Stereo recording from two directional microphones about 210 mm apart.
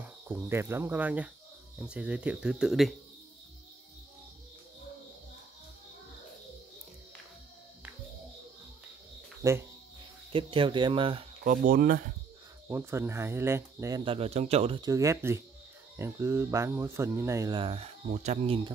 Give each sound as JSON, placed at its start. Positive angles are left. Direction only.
{"t": 0.0, "sound": "cricket", "side_deg": -10}
{"t": 1.8, "sound": "speech", "side_deg": -5}
{"t": 9.4, "sound": "speech", "side_deg": -15}
{"t": 10.3, "sound": "speech", "side_deg": -25}
{"t": 11.5, "sound": "speech", "side_deg": -40}
{"t": 12.6, "sound": "speech", "side_deg": -10}